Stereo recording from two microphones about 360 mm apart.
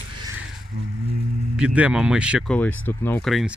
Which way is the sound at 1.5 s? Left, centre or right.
Centre.